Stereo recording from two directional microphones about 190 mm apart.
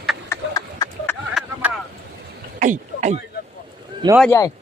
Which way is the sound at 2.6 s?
40° right (ahead or behind).